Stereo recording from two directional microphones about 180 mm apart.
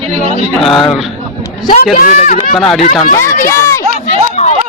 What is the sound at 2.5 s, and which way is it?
Speech, centre (ahead or behind).